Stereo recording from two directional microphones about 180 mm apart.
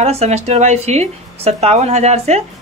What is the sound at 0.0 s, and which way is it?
Speech, 35° right (ahead or behind).